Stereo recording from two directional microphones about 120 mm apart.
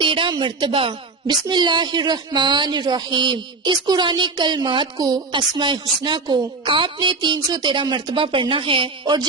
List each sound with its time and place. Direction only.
0.0 s a woman's voice: 45° right (ahead or behind)